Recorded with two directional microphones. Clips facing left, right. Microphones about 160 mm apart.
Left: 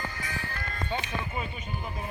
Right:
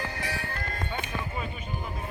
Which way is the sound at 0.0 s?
70° right (ahead or behind).